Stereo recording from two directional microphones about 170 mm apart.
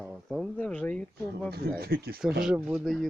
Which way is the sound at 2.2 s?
5° right (ahead or behind).